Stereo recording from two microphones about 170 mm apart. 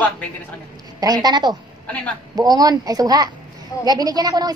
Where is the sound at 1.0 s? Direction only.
25° right (ahead or behind).